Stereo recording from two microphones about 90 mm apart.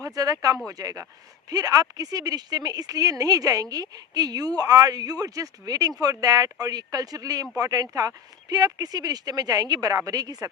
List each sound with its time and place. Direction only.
0.0 s speech: 40° right (ahead or behind)